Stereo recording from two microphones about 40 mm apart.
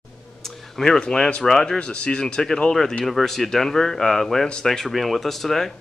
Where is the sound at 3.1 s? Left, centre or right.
Centre.